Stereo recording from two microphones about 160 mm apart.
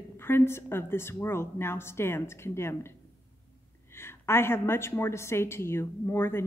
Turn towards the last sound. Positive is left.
turn(degrees=15)  # may be behind; listen again after turning